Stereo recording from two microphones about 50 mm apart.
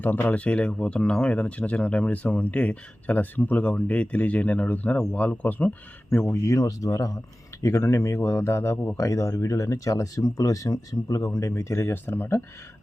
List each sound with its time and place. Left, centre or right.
0.0 s speech: left
6.3 s speech: left
7.6 s speech: left
9.0 s speech: left
11.9 s speech: left